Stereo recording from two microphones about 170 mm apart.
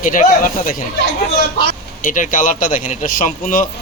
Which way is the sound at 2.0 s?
50° left (ahead or behind).